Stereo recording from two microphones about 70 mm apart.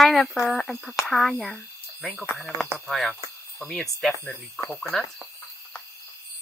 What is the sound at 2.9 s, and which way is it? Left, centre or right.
Speech, centre.